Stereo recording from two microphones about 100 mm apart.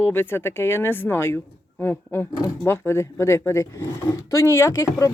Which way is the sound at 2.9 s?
25° left (ahead or behind).